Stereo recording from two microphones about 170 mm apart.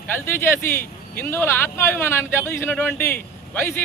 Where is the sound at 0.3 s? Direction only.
15° left (ahead or behind).